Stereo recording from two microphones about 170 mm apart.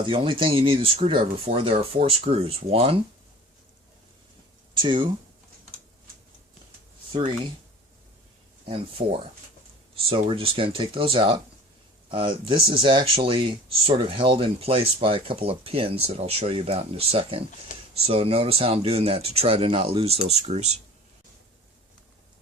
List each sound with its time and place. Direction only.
0.0 s speech: 30° right (ahead or behind)
4.8 s speech: 30° right (ahead or behind)
7.1 s speech: 30° right (ahead or behind)
8.6 s speech: 35° right (ahead or behind)
17.7 s a sound: 50° left (ahead or behind)
18.0 s speech: 35° right (ahead or behind)